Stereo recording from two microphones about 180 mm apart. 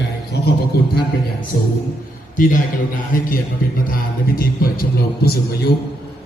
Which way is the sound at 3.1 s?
50° left (ahead or behind).